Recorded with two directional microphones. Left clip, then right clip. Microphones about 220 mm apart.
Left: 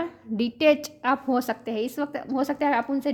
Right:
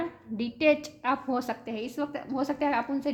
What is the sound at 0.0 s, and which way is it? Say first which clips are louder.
A woman's voice: left 5 dB; 45° left (ahead or behind).